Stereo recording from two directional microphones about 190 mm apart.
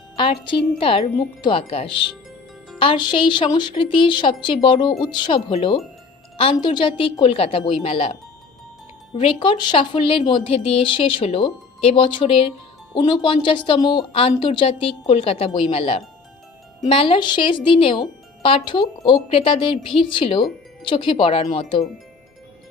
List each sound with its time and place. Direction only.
0.8 s speech: 30° left (ahead or behind)
9.1 s speech: 25° left (ahead or behind)